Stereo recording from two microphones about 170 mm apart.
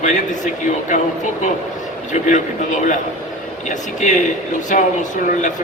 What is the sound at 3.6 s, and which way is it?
A man's voice, 45° left (ahead or behind).